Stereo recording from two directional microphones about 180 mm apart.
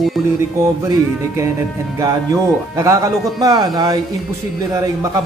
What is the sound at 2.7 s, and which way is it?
A man's voice, 15° right (ahead or behind).